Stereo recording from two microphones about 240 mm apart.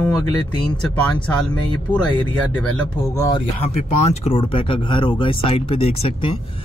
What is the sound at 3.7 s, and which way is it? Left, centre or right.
Speech, left.